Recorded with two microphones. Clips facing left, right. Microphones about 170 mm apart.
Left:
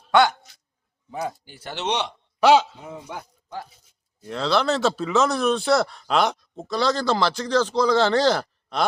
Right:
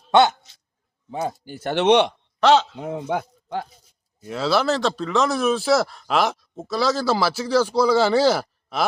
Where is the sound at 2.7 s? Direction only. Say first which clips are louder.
Right 10 dB; 60° right (ahead or behind).